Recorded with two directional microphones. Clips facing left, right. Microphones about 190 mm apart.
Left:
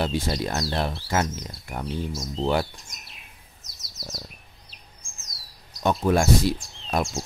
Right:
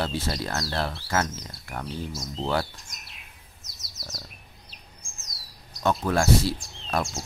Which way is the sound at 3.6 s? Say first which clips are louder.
Left 3 dB; centre (ahead or behind).